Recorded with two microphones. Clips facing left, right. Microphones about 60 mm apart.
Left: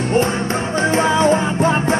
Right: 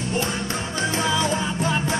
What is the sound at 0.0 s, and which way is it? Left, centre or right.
Music, left.